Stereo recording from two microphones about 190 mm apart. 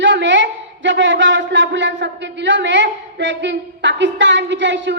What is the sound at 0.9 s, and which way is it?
A man's voice, 70° right (ahead or behind).